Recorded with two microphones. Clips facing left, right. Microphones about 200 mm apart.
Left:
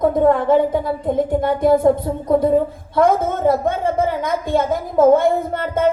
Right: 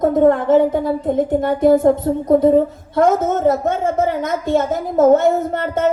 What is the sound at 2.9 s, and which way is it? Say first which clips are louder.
A woman's voice: right 1 dB; 45° right (ahead or behind).